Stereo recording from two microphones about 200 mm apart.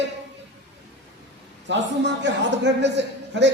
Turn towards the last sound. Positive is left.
turn(degrees=-60)  # may be behind; listen again after turning